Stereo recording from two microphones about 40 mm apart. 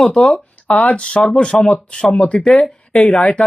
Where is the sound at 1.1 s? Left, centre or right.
Left.